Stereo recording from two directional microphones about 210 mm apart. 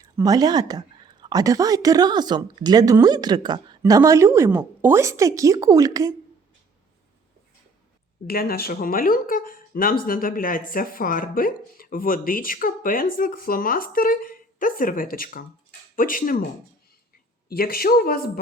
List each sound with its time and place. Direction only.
0.0 s a woman's voice: 15° right (ahead or behind)
8.3 s speech: 45° left (ahead or behind)
17.5 s speech: 45° left (ahead or behind)